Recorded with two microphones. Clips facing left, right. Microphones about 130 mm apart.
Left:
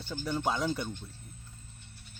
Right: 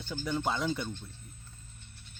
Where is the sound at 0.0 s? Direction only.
10° left (ahead or behind).